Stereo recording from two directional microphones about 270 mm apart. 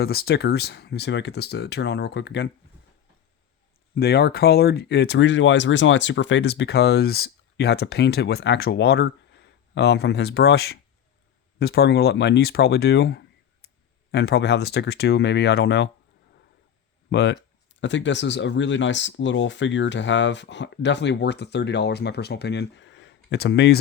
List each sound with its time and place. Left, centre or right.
0.0 s speech: left
3.9 s speech: left
17.1 s speech: left